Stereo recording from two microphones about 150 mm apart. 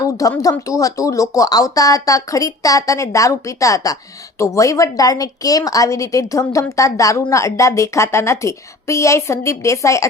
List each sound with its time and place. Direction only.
0.0 s a woman's voice: 20° left (ahead or behind)